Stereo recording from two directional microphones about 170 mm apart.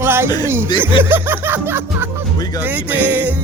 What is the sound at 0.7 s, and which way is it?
Speech, 25° left (ahead or behind).